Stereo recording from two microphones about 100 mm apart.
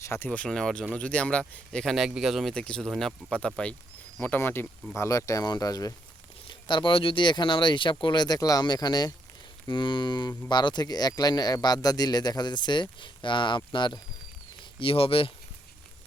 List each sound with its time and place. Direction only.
0.0 s speech: 25° left (ahead or behind)
0.3 s speech: 10° left (ahead or behind)
3.2 s speech: 10° left (ahead or behind)
4.9 s speech: 35° left (ahead or behind)
6.5 s speech: 50° left (ahead or behind)
14.6 s speech: 60° left (ahead or behind)